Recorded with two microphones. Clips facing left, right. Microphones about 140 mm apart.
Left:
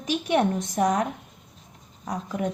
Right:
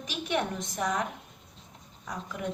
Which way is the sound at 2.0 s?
40° left (ahead or behind).